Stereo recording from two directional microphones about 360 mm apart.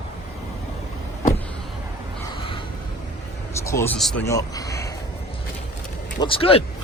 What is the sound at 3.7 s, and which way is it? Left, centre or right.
Speech, centre.